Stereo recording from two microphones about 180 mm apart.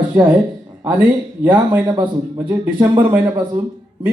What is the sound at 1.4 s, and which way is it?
Speech, 10° right (ahead or behind).